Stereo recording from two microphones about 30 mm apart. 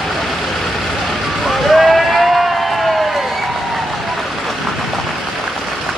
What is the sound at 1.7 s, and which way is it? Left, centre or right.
Vehicle, centre.